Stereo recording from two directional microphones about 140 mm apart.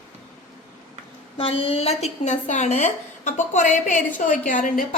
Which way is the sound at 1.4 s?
40° left (ahead or behind).